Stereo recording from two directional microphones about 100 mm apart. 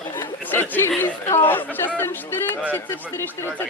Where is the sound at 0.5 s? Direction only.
20° left (ahead or behind).